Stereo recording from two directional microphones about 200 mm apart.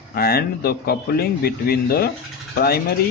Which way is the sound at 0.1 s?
50° left (ahead or behind).